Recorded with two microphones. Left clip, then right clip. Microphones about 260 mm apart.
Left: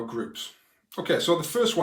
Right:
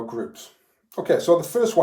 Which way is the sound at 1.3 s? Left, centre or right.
Left.